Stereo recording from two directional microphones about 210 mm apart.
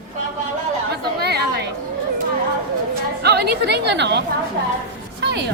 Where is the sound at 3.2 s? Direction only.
50° right (ahead or behind).